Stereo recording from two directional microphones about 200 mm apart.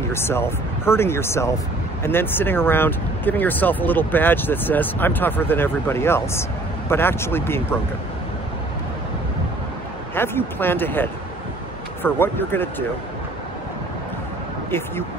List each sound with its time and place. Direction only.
0.1 s speech: 10° left (ahead or behind)
10.1 s speech: 10° left (ahead or behind)